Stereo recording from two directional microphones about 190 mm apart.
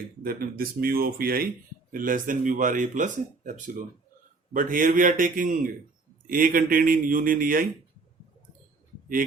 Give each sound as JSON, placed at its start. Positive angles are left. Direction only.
{"t": 0.2, "sound": "speech", "side_deg": -50}